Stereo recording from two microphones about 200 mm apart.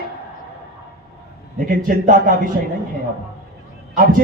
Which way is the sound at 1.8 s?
40° right (ahead or behind).